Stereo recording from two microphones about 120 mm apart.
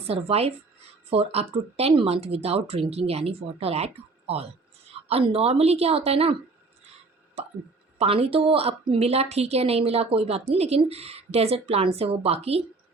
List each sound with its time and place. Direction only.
0.0 s a woman's voice: 55° right (ahead or behind)
7.9 s a woman's voice: 55° right (ahead or behind)